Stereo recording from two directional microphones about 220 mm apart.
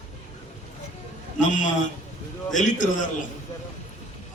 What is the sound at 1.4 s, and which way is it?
A man's voice, 35° left (ahead or behind).